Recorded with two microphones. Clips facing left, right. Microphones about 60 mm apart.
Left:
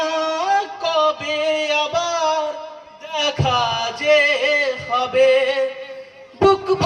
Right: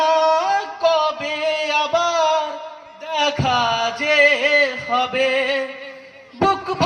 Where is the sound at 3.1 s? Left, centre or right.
Right.